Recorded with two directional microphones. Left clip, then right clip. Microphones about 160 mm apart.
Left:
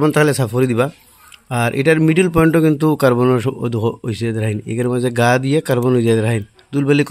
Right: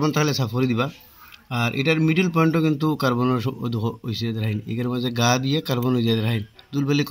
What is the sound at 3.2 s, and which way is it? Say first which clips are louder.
Speech: left 8 dB; 45° left (ahead or behind).